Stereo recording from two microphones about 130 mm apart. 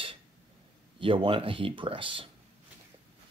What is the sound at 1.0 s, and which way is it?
Speech, 40° right (ahead or behind).